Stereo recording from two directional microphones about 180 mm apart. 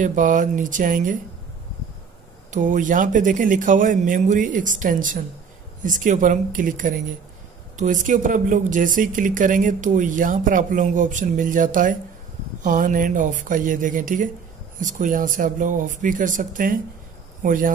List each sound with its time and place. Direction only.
0.0 s speech: 45° right (ahead or behind)
2.5 s speech: 45° right (ahead or behind)